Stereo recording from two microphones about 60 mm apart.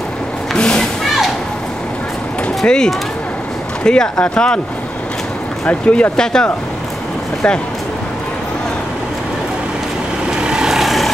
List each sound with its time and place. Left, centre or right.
0.6 s a sound: centre
2.6 s speech: centre
5.7 s speech: left
10.4 s vehicle: centre